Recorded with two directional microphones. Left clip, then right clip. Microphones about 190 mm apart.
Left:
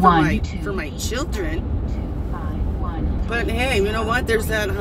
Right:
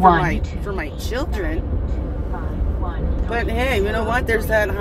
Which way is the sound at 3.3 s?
15° left (ahead or behind).